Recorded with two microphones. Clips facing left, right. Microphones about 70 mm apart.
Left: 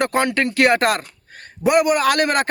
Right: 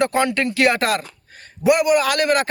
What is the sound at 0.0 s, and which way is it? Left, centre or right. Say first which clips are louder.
A man's voice: even; left.